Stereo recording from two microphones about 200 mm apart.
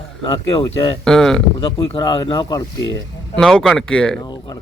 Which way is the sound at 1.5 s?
25° left (ahead or behind).